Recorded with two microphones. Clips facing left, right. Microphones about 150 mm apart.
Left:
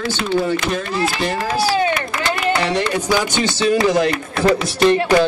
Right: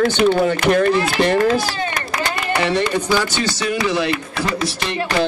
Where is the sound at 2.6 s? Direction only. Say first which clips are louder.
Right 1 dB; centre (ahead or behind).